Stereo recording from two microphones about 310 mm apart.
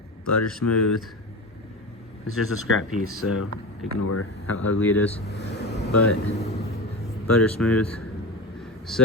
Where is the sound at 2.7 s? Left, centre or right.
Left.